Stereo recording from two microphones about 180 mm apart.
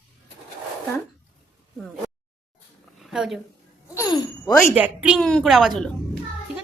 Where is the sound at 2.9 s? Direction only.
Centre (ahead or behind).